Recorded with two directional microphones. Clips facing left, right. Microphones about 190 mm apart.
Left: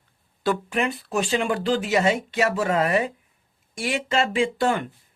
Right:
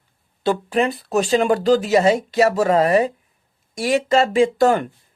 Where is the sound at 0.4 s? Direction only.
30° right (ahead or behind).